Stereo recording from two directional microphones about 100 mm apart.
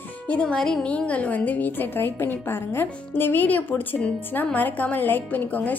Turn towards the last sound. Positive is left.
turn(degrees=15)  # may be behind; listen again after turning